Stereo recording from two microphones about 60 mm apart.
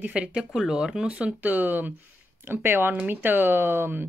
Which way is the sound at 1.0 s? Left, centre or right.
Right.